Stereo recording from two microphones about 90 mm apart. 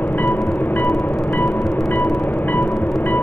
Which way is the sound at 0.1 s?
25° left (ahead or behind).